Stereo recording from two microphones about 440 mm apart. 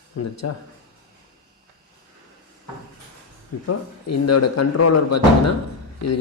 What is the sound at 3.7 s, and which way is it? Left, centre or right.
Speech, left.